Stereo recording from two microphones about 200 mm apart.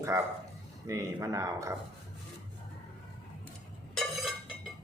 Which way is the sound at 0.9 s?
15° right (ahead or behind).